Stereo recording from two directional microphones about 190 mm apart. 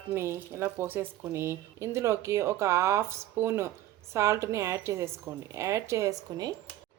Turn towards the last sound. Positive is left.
turn(degrees=-20)  # may be behind; listen again after turning